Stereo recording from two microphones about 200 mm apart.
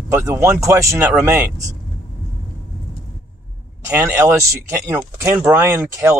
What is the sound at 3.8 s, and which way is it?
Speech, 10° right (ahead or behind).